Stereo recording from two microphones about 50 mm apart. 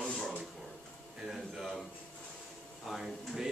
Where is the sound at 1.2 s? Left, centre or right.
Centre.